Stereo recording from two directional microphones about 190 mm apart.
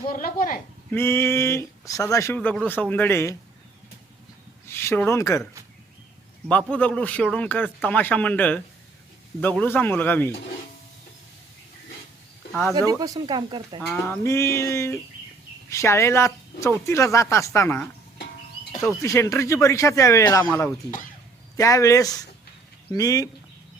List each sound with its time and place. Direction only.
0.1 s speech: 45° left (ahead or behind)
0.9 s speech: 10° left (ahead or behind)
4.7 s speech: 15° left (ahead or behind)
6.5 s speech: 5° left (ahead or behind)
12.5 s speech: 5° left (ahead or behind)
12.9 s speech: 20° right (ahead or behind)
13.8 s speech: 10° left (ahead or behind)
19.0 s speech: 15° left (ahead or behind)
21.5 s speech: 15° left (ahead or behind)